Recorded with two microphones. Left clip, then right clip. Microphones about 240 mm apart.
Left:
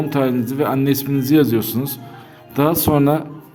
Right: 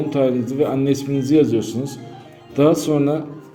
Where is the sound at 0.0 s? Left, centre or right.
Left.